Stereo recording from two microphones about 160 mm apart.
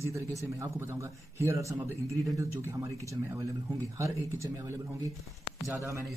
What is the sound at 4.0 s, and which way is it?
Speech, 20° right (ahead or behind).